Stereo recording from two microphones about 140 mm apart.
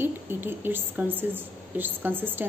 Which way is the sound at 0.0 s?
15° right (ahead or behind).